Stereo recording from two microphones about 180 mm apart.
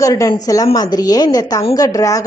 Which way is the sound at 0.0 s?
20° left (ahead or behind).